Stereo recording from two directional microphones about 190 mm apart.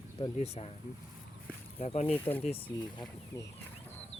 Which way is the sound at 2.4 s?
30° left (ahead or behind).